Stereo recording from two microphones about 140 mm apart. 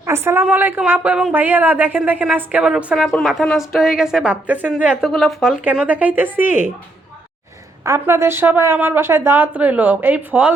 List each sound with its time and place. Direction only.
0.0 s a woman's voice: 20° right (ahead or behind)
7.9 s speech: 15° right (ahead or behind)